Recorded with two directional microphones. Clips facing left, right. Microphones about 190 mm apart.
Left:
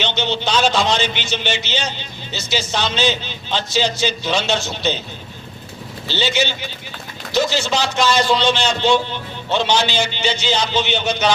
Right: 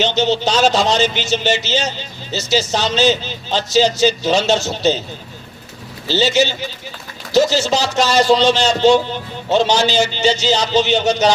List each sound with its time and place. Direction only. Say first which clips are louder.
0.0 s a man's voice: right 6 dB; 40° right (ahead or behind)
6.1 s a man's voice: right 5 dB; 40° right (ahead or behind)